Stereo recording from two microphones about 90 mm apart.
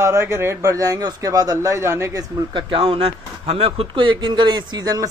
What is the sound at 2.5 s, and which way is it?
Speech, 80° right.